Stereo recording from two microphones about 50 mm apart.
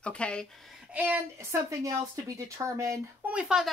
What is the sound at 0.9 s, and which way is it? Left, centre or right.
Speech, right.